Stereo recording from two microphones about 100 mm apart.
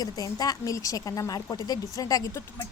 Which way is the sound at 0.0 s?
40° left (ahead or behind).